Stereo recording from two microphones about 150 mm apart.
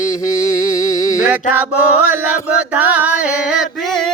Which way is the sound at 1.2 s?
10° right (ahead or behind).